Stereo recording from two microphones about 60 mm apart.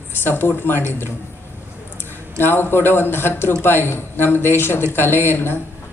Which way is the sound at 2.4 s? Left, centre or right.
Left.